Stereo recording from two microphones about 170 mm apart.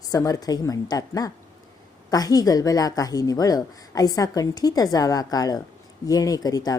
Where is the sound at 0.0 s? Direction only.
20° left (ahead or behind).